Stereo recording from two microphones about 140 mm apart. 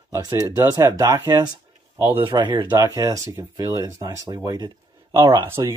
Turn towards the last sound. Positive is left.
turn(degrees=-30)  # may be behind; listen again after turning